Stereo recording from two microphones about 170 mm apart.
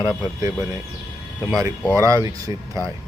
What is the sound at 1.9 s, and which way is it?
Speech, 20° right (ahead or behind).